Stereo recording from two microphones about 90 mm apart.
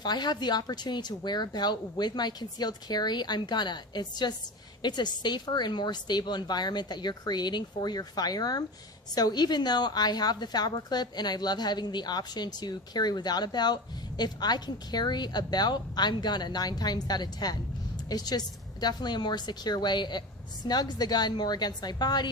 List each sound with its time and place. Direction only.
0.0 s a woman's voice: 50° left (ahead or behind)